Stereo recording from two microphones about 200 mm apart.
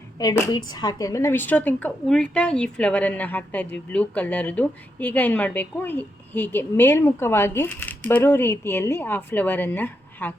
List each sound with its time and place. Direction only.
0.2 s a woman's voice: 15° left (ahead or behind)